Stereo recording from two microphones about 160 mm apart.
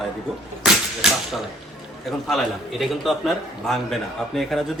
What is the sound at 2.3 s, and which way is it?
A man's voice, centre (ahead or behind).